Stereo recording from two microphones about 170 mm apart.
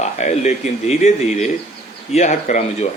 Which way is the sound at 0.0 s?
40° left (ahead or behind).